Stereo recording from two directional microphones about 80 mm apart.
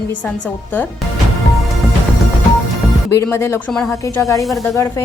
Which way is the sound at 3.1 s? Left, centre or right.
Left.